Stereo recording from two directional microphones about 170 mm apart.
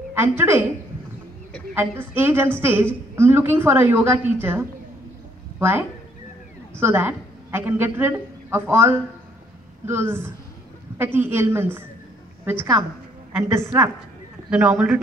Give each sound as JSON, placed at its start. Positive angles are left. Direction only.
{"t": 0.1, "sound": "a woman's voice", "side_deg": -15}
{"t": 1.8, "sound": "a woman's voice", "side_deg": -10}
{"t": 13.4, "sound": "a woman's voice", "side_deg": -15}